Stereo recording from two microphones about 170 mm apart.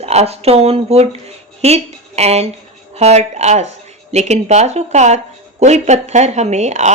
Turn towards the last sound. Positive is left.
turn(degrees=-40)  # may be behind; listen again after turning